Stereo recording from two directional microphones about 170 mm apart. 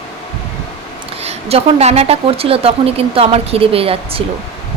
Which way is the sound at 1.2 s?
35° right (ahead or behind).